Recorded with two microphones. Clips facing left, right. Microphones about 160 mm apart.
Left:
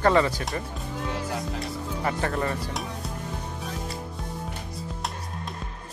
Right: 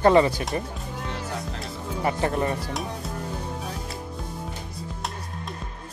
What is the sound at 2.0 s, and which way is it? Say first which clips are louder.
Speech: right 3 dB; 20° right (ahead or behind).